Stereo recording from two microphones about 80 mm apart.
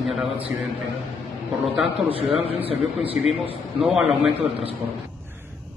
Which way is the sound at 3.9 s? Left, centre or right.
Centre.